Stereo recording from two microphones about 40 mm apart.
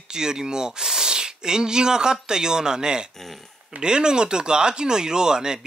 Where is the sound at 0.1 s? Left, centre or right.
Centre.